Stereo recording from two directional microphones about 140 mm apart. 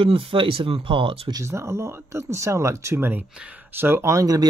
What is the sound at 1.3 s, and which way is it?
Speech, 20° right (ahead or behind).